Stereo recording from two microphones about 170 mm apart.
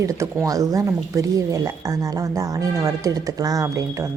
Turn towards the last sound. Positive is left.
turn(degrees=-15)  # may be behind; listen again after turning